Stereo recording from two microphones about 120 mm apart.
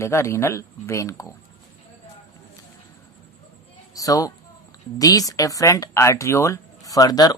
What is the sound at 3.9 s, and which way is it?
Speech, 30° left (ahead or behind).